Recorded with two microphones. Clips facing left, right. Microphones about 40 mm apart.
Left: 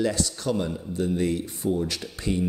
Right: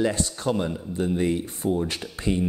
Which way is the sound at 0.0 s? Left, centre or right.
Right.